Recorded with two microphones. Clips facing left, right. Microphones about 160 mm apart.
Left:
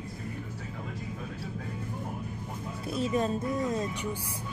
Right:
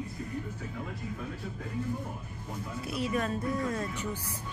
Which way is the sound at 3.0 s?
25° left (ahead or behind).